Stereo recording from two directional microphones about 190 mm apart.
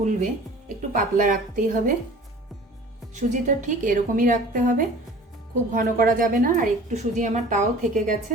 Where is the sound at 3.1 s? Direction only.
40° right (ahead or behind).